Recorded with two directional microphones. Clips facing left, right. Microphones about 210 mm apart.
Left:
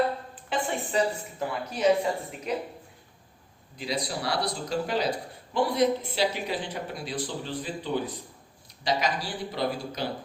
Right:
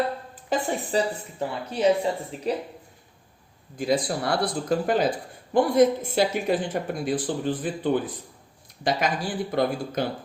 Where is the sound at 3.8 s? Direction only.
50° right (ahead or behind).